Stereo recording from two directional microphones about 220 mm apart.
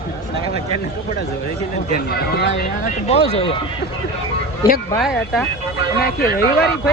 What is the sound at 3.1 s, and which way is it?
Speech, 25° left (ahead or behind).